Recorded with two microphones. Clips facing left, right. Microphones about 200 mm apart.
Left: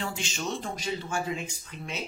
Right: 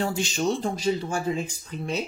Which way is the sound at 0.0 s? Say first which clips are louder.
Right 8 dB; 40° right (ahead or behind).